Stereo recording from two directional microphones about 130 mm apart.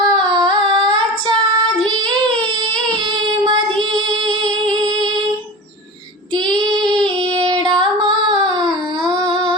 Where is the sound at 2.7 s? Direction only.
35° right (ahead or behind).